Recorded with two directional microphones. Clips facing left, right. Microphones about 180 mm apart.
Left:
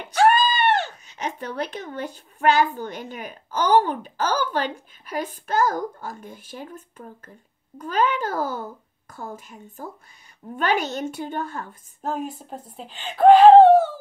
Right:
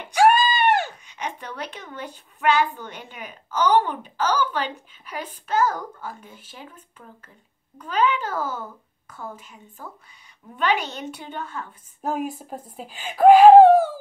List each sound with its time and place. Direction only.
0.1 s a sound: 10° right (ahead or behind)
1.0 s a child's voice: 45° left (ahead or behind)
12.0 s speech: 10° right (ahead or behind)